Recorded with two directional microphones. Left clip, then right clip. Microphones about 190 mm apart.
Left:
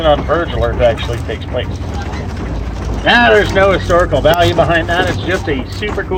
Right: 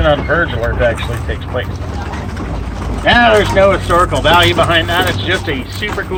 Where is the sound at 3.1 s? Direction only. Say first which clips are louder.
Even; 20° left (ahead or behind).